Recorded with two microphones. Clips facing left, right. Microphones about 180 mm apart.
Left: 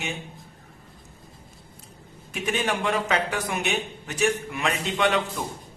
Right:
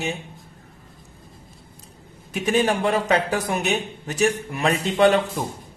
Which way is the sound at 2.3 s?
40° right (ahead or behind).